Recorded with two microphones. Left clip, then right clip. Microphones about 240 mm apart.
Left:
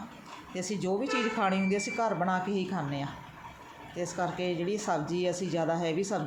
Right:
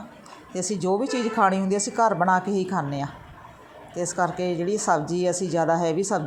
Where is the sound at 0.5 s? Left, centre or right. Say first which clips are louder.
Right 7 dB; right.